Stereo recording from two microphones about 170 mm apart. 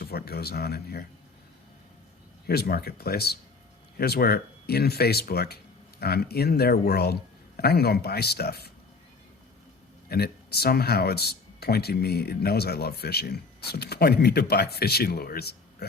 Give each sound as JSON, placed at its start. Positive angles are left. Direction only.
{"t": 0.0, "sound": "speech", "side_deg": 65}
{"t": 2.5, "sound": "speech", "side_deg": 65}
{"t": 10.1, "sound": "speech", "side_deg": 65}